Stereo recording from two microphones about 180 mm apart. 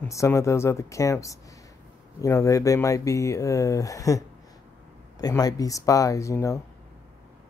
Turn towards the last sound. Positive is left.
turn(degrees=15)  # may be behind; listen again after turning